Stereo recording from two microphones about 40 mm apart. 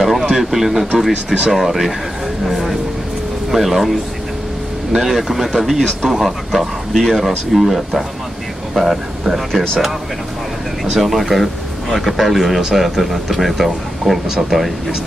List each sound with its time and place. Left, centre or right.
0.0 s a sound: centre
1.5 s speech: centre
4.9 s speech: centre
9.5 s speech: centre
10.9 s speech: centre